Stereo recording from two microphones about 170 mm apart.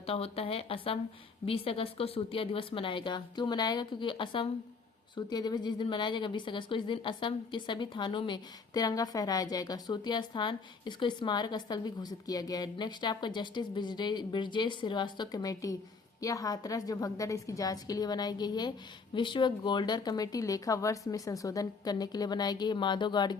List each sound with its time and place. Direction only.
0.0 s a woman's voice: 35° left (ahead or behind)